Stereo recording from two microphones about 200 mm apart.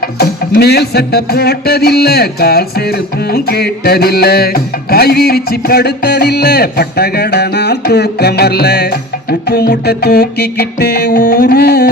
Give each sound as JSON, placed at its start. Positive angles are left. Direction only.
{"t": 0.0, "sound": "music", "side_deg": 50}